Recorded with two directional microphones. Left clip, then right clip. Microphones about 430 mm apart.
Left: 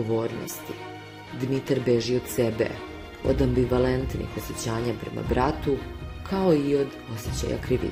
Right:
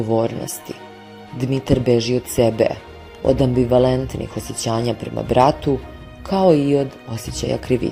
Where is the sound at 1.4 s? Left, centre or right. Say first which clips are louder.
Right 6 dB; centre.